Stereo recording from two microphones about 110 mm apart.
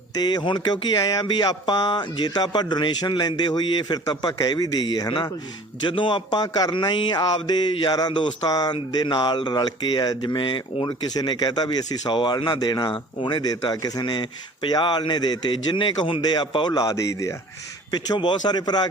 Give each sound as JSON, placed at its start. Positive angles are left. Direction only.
{"t": 0.2, "sound": "speech", "side_deg": 40}
{"t": 5.8, "sound": "speech", "side_deg": 45}
{"t": 17.9, "sound": "speech", "side_deg": 45}